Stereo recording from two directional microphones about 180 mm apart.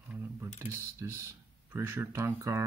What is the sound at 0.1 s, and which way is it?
Speech, 15° right (ahead or behind).